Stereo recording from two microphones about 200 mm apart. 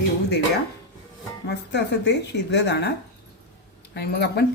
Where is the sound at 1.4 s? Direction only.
55° left (ahead or behind).